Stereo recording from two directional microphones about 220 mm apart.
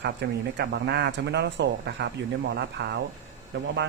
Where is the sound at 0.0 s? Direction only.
50° right (ahead or behind).